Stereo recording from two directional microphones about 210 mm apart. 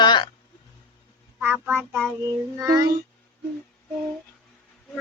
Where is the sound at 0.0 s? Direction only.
20° left (ahead or behind).